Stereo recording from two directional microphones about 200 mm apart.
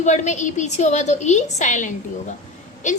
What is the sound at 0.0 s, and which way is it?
A woman's voice, 35° left (ahead or behind).